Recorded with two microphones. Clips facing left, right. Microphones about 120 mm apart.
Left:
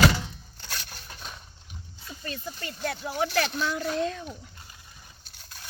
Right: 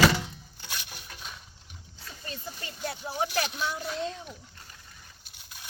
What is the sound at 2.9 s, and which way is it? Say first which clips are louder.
Speech: left 3 dB; 10° right (ahead or behind).